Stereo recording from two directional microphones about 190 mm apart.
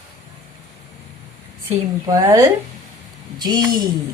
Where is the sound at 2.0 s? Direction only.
15° right (ahead or behind).